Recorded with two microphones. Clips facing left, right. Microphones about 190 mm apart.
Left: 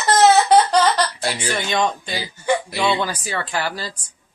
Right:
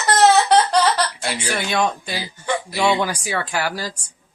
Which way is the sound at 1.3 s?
10° right (ahead or behind).